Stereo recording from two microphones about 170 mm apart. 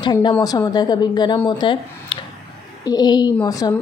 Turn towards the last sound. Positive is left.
turn(degrees=20)  # may be behind; listen again after turning